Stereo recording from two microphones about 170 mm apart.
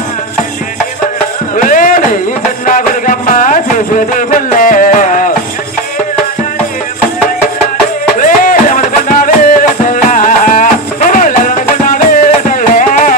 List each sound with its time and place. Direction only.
1.6 s a sound: 50° left (ahead or behind)
2.6 s music: 50° left (ahead or behind)
8.2 s music: 50° left (ahead or behind)